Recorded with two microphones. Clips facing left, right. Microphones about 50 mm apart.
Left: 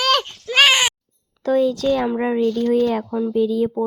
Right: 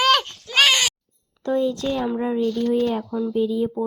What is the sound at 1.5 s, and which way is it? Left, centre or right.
Speech, left.